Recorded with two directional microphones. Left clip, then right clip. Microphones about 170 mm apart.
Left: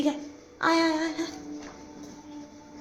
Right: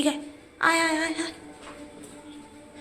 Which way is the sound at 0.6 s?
25° left (ahead or behind).